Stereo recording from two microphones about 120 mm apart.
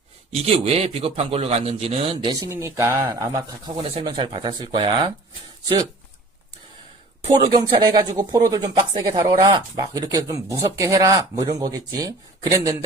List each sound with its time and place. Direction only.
0.4 s a man's voice: 55° right (ahead or behind)
2.3 s speech: 30° right (ahead or behind)
4.3 s speech: 50° right (ahead or behind)
4.6 s speech: 40° right (ahead or behind)
7.3 s speech: 45° right (ahead or behind)